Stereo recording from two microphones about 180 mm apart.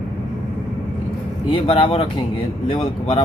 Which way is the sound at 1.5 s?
30° left (ahead or behind).